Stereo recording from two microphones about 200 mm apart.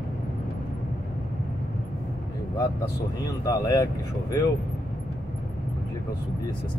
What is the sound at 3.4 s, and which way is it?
Speech, 15° left (ahead or behind).